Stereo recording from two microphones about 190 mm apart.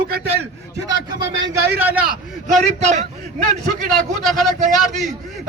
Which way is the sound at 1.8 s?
10° right (ahead or behind).